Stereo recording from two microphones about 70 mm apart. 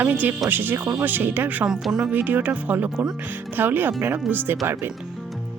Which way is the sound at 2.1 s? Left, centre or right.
Right.